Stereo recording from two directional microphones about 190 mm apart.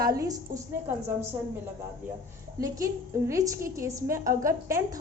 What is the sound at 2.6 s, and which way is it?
A woman's voice, 15° right (ahead or behind).